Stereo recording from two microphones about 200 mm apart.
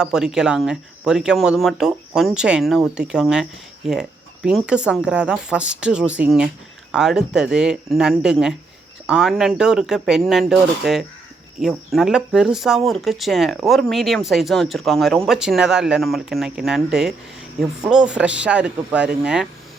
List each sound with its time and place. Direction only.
0.0 s speech: 5° right (ahead or behind)